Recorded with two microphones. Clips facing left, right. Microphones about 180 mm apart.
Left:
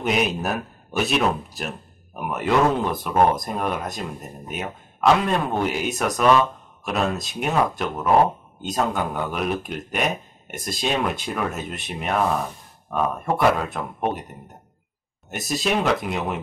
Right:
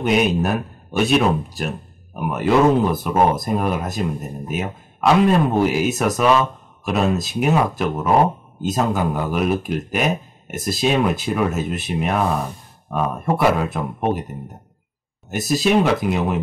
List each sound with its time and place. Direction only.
0.0 s speech: centre (ahead or behind)
15.2 s speech: centre (ahead or behind)